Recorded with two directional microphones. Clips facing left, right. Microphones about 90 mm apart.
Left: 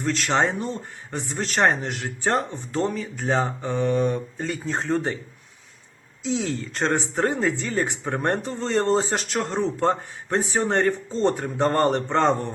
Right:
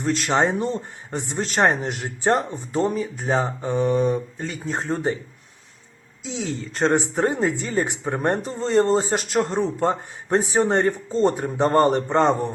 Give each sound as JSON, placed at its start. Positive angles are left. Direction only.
{"t": 0.0, "sound": "speech", "side_deg": -20}
{"t": 2.3, "sound": "a man's voice", "side_deg": -10}
{"t": 4.4, "sound": "a man's voice", "side_deg": -5}
{"t": 6.2, "sound": "speech", "side_deg": 0}
{"t": 6.9, "sound": "a man's voice", "side_deg": -15}
{"t": 10.3, "sound": "a man's voice", "side_deg": -25}